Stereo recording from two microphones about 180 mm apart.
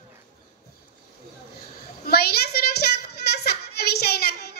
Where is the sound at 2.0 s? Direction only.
60° left (ahead or behind).